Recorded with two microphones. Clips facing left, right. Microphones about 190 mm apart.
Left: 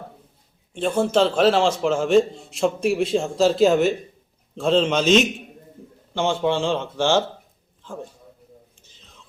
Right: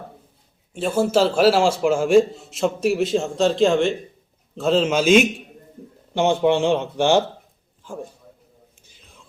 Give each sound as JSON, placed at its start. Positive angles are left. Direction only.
{"t": 0.7, "sound": "a man's voice", "side_deg": -5}
{"t": 8.8, "sound": "whispering", "side_deg": -10}